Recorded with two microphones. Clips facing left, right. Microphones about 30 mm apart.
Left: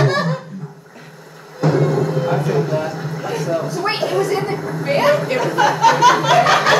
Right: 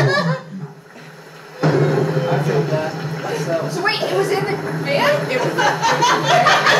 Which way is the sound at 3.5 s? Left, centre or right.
Right.